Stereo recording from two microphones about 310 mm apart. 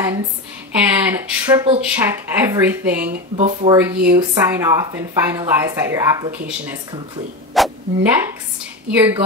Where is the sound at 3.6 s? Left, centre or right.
Centre.